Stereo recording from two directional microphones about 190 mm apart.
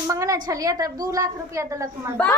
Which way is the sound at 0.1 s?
15° right (ahead or behind).